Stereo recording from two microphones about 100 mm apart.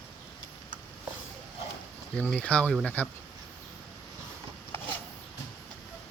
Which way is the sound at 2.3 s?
10° left (ahead or behind).